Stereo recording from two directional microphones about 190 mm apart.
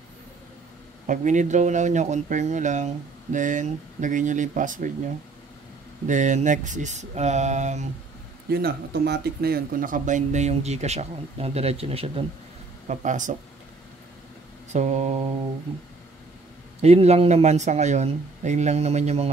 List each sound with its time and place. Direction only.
1.0 s speech: 40° right (ahead or behind)
6.0 s speech: 40° right (ahead or behind)
8.5 s speech: 55° right (ahead or behind); by 12.3 s 30° right (ahead or behind)
12.8 s speech: 40° right (ahead or behind)
14.7 s speech: 35° right (ahead or behind)
16.8 s speech: 35° right (ahead or behind)